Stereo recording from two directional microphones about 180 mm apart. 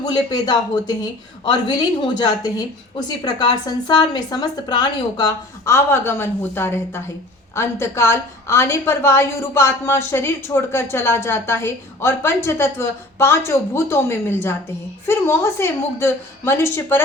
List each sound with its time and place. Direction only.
0.0 s a woman's voice: 20° left (ahead or behind)